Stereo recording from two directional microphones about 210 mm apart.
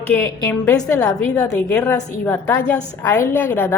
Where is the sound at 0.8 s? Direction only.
15° left (ahead or behind).